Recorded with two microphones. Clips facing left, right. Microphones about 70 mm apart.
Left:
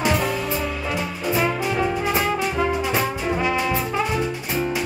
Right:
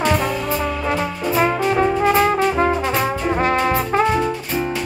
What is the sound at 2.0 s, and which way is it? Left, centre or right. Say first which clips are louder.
Brass instrument: right 6 dB; right.